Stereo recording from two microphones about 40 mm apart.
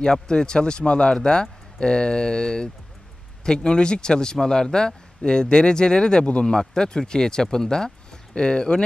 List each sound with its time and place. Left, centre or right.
0.0 s a man's voice: centre